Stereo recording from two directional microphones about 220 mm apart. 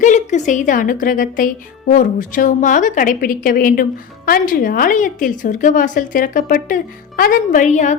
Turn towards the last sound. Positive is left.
turn(degrees=35)  # may be behind; listen again after turning